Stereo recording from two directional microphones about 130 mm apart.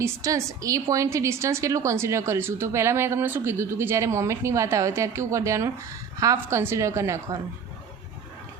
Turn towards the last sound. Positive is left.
turn(degrees=-25)  # may be behind; listen again after turning